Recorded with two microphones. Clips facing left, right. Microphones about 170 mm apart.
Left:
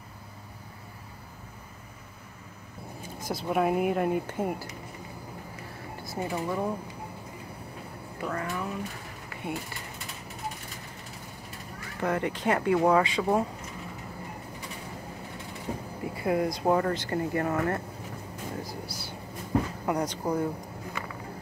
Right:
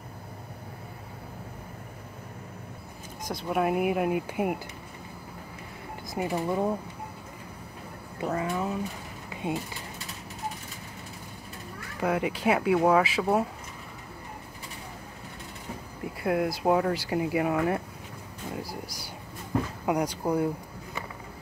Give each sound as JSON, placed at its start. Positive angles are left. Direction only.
{"t": 3.3, "sound": "speech", "side_deg": 5}
{"t": 6.0, "sound": "speech", "side_deg": -15}
{"t": 8.2, "sound": "speech", "side_deg": -20}
{"t": 9.3, "sound": "a sound", "side_deg": -20}
{"t": 12.0, "sound": "speech", "side_deg": -10}
{"t": 16.2, "sound": "speech", "side_deg": 0}